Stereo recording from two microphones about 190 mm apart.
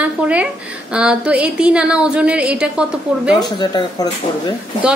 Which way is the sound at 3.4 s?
20° left (ahead or behind).